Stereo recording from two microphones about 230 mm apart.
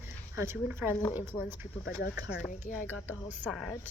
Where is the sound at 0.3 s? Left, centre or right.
Centre.